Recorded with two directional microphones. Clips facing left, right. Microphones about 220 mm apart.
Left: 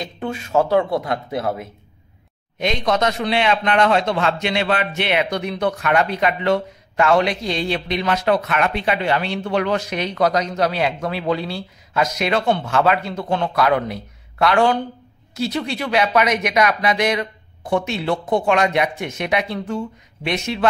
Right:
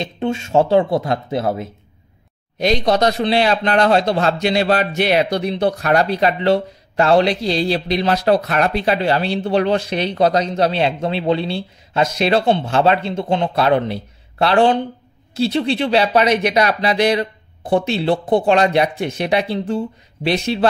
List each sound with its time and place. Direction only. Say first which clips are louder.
0.0 s a man's voice: right 5 dB; 25° right (ahead or behind)